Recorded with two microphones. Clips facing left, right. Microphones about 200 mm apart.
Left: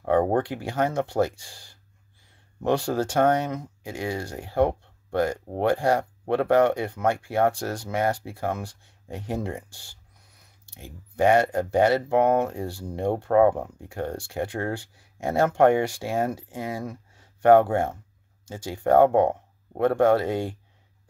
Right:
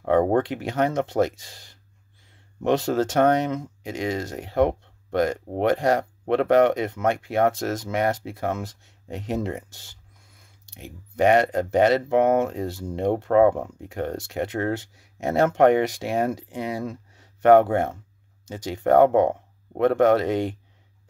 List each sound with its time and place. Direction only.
0.5 s speech: 20° right (ahead or behind)